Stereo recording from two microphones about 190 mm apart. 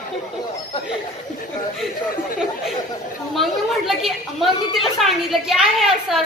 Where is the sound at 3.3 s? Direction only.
Centre (ahead or behind).